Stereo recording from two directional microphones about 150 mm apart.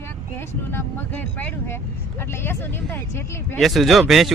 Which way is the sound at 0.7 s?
15° left (ahead or behind).